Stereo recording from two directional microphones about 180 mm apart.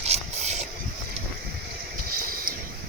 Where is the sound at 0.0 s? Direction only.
35° right (ahead or behind).